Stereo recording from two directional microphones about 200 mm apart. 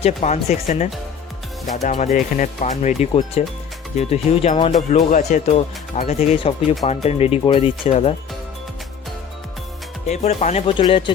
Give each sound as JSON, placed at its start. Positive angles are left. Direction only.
{"t": 0.0, "sound": "speech", "side_deg": 35}
{"t": 10.1, "sound": "speech", "side_deg": 35}